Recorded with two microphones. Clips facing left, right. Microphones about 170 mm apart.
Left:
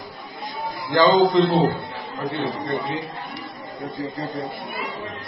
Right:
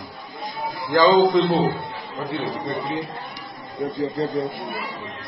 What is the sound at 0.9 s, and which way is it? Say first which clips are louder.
A man's voice: even; centre (ahead or behind).